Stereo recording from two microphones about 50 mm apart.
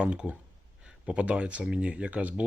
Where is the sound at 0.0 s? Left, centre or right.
Right.